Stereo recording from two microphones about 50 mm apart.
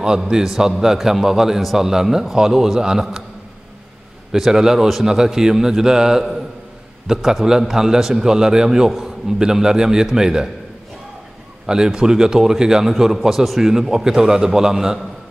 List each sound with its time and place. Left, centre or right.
0.0 s a man's voice: centre
4.3 s a man's voice: centre
11.6 s a man's voice: centre